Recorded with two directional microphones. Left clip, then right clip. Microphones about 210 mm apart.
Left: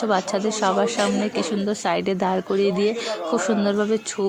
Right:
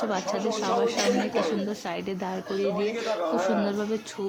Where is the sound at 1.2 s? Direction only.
10° right (ahead or behind).